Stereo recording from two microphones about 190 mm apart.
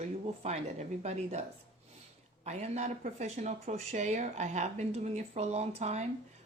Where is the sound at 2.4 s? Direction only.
35° right (ahead or behind).